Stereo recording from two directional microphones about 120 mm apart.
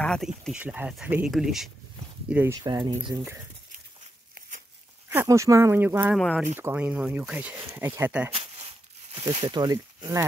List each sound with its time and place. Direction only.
0.0 s a sound: 5° left (ahead or behind)
0.5 s speech: 10° right (ahead or behind)
2.5 s speech: 30° right (ahead or behind)
5.1 s speech: 20° right (ahead or behind)
6.1 s speech: 5° left (ahead or behind)
6.5 s speech: 15° right (ahead or behind)
8.5 s a sound: 55° right (ahead or behind)
9.3 s speech: 45° right (ahead or behind)